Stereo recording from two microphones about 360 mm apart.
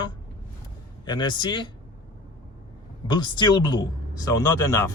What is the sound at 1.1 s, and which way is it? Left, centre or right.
Speech, centre.